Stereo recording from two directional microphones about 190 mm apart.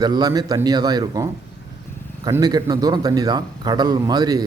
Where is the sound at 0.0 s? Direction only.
20° right (ahead or behind).